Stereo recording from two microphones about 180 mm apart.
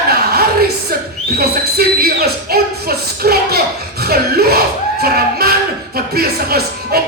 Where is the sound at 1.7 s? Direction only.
60° right (ahead or behind).